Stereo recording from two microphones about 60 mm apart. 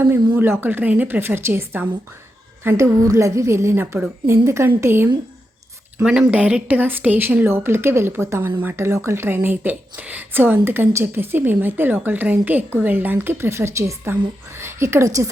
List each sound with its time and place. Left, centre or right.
0.0 s a woman's voice: right
1.2 s a woman's voice: right
2.8 s a woman's voice: right
6.0 s speech: centre; by 7.3 s right
7.4 s a woman's voice: right
14.6 s a sound: right
15.0 s a woman's voice: right